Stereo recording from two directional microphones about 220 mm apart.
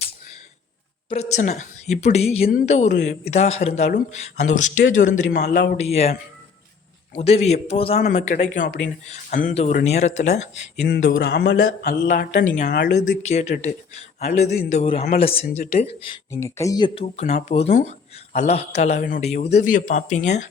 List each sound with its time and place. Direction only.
1.1 s speech: 30° left (ahead or behind)
7.2 s speech: 30° left (ahead or behind)
10.8 s speech: 45° left (ahead or behind)
13.2 s speech: 30° left (ahead or behind)
15.4 s speech: 40° left (ahead or behind)
16.1 s speech: 15° left (ahead or behind); by 20.4 s 35° left (ahead or behind)